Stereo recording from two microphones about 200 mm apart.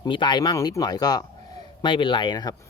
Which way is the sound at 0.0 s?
25° left (ahead or behind).